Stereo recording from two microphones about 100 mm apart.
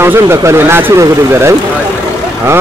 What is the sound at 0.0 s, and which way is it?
Speech, 25° right (ahead or behind).